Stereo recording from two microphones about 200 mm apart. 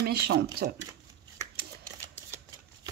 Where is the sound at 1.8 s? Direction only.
15° right (ahead or behind).